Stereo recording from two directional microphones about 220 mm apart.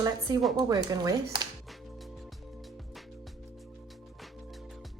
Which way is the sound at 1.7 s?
Centre (ahead or behind).